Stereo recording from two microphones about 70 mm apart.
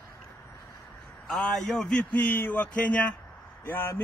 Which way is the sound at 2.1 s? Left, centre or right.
Left.